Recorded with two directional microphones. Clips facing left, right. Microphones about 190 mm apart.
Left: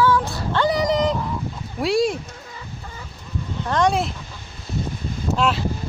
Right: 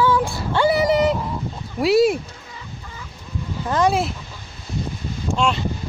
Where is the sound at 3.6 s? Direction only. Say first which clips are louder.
Right 1 dB; 5° right (ahead or behind).